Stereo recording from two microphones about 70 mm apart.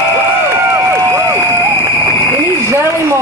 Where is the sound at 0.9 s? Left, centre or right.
Right.